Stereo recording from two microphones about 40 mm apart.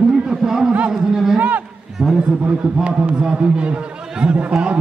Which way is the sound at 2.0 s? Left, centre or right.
Centre.